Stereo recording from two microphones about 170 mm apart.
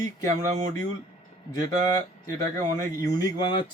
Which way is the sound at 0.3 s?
45° right (ahead or behind).